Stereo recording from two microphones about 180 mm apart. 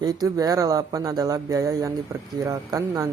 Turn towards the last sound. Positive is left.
turn(degrees=-20)  # may be behind; listen again after turning